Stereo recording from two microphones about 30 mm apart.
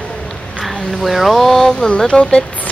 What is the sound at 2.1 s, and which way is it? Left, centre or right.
Speech, left.